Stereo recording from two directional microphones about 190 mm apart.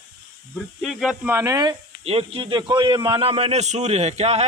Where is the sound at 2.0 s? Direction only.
30° right (ahead or behind).